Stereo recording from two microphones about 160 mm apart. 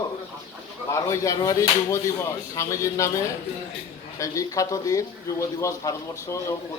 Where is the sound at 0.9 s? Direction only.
20° left (ahead or behind).